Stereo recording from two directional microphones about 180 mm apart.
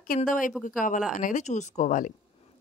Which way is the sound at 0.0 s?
50° left (ahead or behind).